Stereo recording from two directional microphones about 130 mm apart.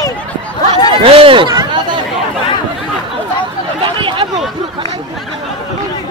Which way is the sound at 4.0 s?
40° right (ahead or behind).